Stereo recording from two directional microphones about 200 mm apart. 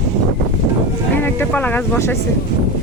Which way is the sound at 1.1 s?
10° left (ahead or behind).